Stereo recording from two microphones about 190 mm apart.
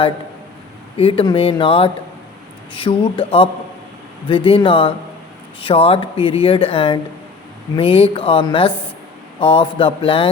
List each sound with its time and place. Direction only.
0.9 s speech: 30° left (ahead or behind)